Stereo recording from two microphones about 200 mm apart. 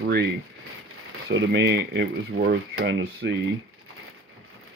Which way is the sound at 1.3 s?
70° right (ahead or behind).